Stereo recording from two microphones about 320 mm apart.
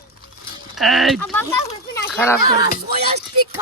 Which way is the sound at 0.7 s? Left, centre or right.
Centre.